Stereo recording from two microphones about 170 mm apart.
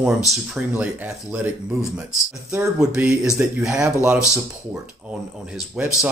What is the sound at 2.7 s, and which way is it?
Speech, 5° right (ahead or behind).